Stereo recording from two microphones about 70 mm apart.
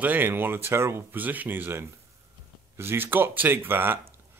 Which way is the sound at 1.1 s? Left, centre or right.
Right.